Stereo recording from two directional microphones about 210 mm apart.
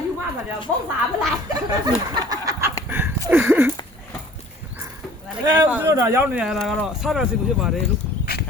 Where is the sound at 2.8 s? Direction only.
10° right (ahead or behind).